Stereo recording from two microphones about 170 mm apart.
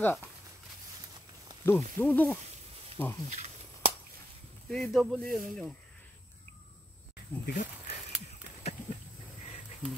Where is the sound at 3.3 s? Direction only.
45° right (ahead or behind).